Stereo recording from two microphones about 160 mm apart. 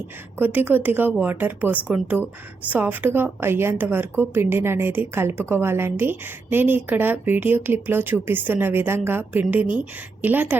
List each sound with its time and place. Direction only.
0.3 s a woman's voice: 10° right (ahead or behind)